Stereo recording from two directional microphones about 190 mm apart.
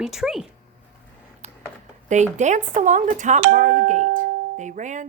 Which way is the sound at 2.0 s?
40° right (ahead or behind).